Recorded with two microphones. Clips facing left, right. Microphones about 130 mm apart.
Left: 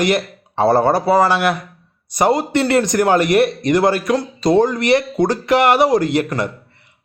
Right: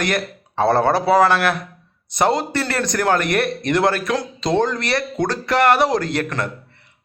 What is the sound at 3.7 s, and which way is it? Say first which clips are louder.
A man's voice: left 1 dB; 10° left (ahead or behind).